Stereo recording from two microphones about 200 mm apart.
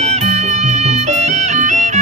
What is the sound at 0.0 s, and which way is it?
Music, 30° right (ahead or behind).